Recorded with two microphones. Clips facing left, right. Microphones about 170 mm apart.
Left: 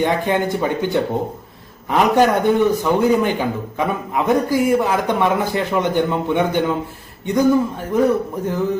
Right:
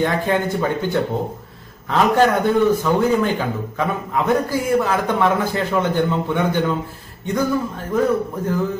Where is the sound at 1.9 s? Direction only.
15° left (ahead or behind).